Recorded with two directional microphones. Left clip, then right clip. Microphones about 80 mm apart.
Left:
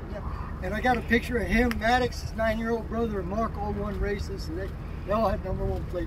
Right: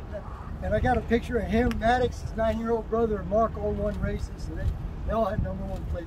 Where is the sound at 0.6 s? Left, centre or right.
Right.